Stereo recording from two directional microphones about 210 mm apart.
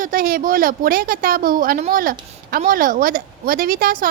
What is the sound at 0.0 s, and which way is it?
A woman's voice, 45° right (ahead or behind).